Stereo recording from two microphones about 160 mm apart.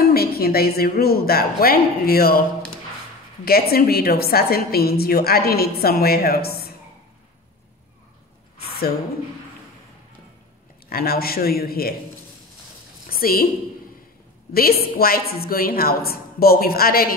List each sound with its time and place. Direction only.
0.0 s a woman's voice: 75° left (ahead or behind)
3.4 s a woman's voice: 70° left (ahead or behind)
10.9 s a woman's voice: 70° left (ahead or behind)
13.2 s a woman's voice: 65° left (ahead or behind)
14.5 s a woman's voice: 70° left (ahead or behind)